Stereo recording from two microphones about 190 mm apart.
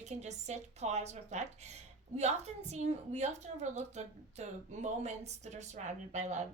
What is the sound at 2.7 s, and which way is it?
A woman's voice, 35° right (ahead or behind).